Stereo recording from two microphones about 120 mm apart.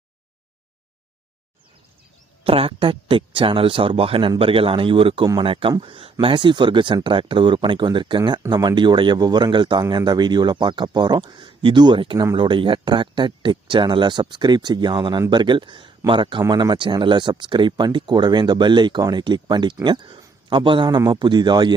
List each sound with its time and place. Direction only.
2.4 s speech: 50° right (ahead or behind)